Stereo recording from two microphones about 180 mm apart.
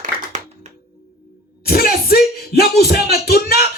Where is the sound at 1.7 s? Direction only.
55° left (ahead or behind).